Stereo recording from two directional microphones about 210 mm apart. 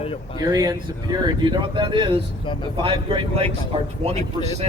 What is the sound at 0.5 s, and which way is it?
Speech, 15° right (ahead or behind).